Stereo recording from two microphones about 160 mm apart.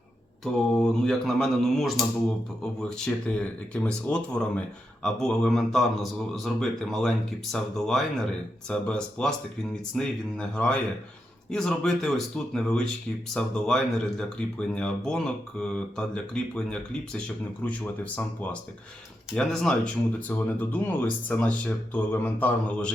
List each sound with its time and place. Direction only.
0.4 s a man's voice: centre (ahead or behind)